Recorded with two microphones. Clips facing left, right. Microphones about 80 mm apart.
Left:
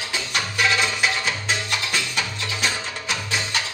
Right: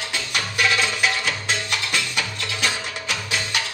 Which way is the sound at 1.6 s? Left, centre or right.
Centre.